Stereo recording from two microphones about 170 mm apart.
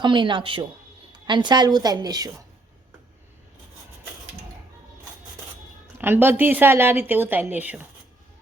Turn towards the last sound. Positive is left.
turn(degrees=-10)  # may be behind; listen again after turning